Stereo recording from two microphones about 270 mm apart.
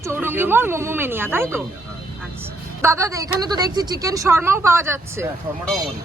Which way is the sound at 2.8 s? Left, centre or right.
Centre.